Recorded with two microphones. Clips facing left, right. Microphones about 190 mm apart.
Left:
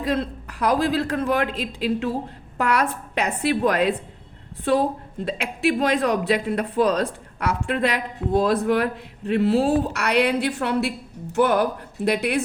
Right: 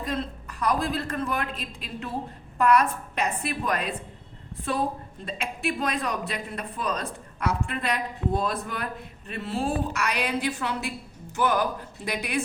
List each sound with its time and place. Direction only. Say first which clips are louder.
0.0 s a man's voice: left 6 dB; 75° left (ahead or behind)
5.2 s a man's voice: left 8 dB; 70° left (ahead or behind)